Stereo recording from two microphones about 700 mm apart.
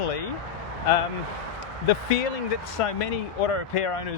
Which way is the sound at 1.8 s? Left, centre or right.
Left.